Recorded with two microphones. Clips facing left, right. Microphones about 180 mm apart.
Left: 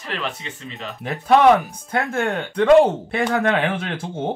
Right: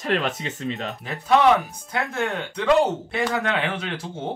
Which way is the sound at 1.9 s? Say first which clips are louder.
Left 4 dB; 50° left (ahead or behind).